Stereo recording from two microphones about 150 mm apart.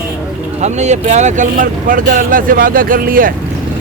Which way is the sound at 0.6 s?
50° right (ahead or behind).